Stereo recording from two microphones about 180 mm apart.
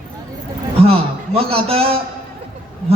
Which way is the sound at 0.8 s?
30° right (ahead or behind).